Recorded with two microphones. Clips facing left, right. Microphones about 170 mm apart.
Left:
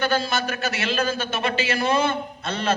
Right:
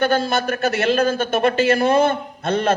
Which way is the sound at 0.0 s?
55° right (ahead or behind).